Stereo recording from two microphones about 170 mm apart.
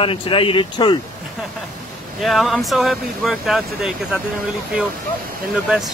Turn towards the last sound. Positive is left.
turn(degrees=-5)  # may be behind; listen again after turning